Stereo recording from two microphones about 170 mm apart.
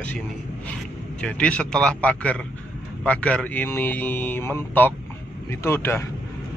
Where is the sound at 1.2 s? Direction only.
5° left (ahead or behind).